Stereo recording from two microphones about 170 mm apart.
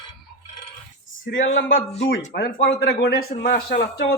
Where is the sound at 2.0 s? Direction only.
70° left (ahead or behind).